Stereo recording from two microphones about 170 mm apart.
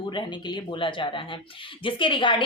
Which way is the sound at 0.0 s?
25° left (ahead or behind).